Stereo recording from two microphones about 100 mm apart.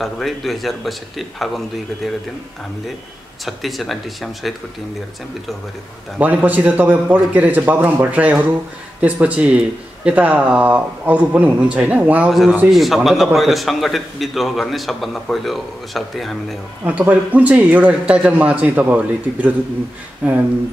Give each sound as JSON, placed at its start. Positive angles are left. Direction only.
{"t": 0.0, "sound": "a man's voice", "side_deg": 0}
{"t": 3.4, "sound": "a man's voice", "side_deg": 0}
{"t": 6.1, "sound": "speech", "side_deg": -15}
{"t": 12.3, "sound": "a man's voice", "side_deg": 0}
{"t": 16.8, "sound": "speech", "side_deg": -15}